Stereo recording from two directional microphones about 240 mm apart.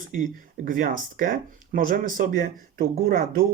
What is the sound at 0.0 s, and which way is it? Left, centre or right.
Speech, right.